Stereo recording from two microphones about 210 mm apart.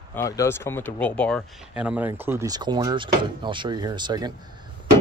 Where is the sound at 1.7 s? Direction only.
5° right (ahead or behind).